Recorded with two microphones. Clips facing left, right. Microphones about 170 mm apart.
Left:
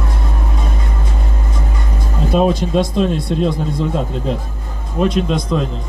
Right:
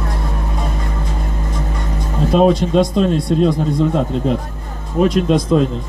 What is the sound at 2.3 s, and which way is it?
Speech, centre (ahead or behind).